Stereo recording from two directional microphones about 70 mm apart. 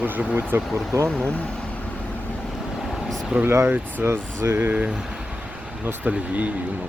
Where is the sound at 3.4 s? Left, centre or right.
Right.